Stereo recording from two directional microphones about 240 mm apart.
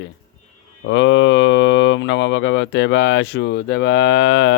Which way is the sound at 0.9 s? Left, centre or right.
Left.